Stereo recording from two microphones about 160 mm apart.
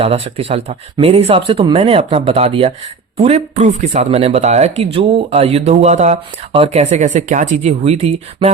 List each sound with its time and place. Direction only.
0.0 s speech: 40° right (ahead or behind)